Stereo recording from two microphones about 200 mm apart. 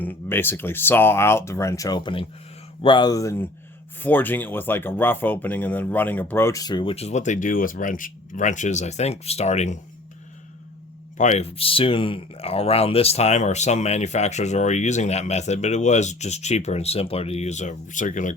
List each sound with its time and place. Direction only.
0.0 s speech: 10° left (ahead or behind); by 9.7 s 35° left (ahead or behind)
11.2 s speech: 35° left (ahead or behind)